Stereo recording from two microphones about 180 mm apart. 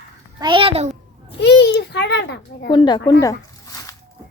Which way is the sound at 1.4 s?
70° left (ahead or behind).